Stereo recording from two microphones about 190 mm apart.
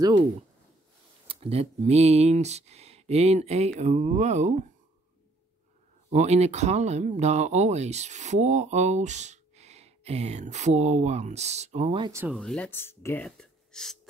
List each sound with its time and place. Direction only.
1.2 s speech: 30° right (ahead or behind)
6.0 s speech: 35° right (ahead or behind)
12.0 s speech: 15° right (ahead or behind)
12.4 s speech: 5° left (ahead or behind)